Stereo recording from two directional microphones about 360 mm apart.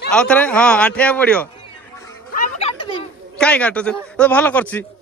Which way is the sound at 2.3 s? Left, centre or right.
Centre.